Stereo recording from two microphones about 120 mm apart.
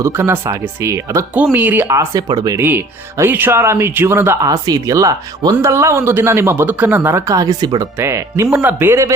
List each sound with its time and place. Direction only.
0.0 s speech: 20° right (ahead or behind)
2.6 s speech: 20° right (ahead or behind)
4.5 s speech: 30° right (ahead or behind)
7.9 s speech: 25° right (ahead or behind)